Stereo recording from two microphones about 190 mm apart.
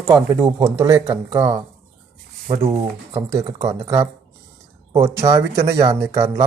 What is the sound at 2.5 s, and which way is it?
Speech, 30° right (ahead or behind).